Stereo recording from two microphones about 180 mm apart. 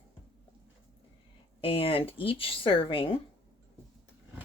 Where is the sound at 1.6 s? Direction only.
30° left (ahead or behind).